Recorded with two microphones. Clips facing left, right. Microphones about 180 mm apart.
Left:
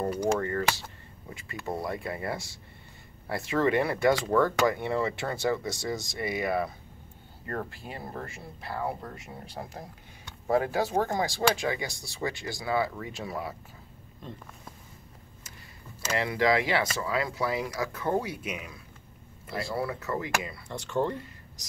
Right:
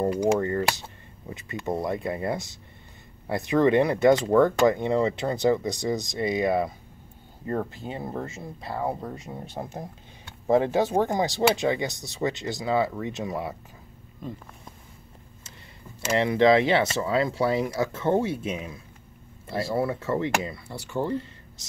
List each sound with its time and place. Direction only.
0.1 s speech: 15° right (ahead or behind)
16.0 s speech: 25° right (ahead or behind)
20.6 s speech: 10° right (ahead or behind)